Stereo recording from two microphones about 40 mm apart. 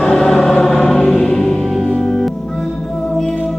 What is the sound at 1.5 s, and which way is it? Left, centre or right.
Music, centre.